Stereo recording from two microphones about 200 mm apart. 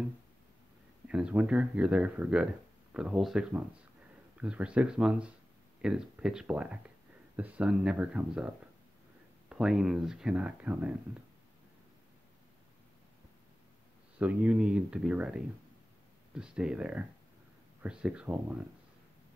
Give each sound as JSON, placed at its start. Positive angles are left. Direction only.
{"t": 1.0, "sound": "speech", "side_deg": -5}
{"t": 14.1, "sound": "speech", "side_deg": -5}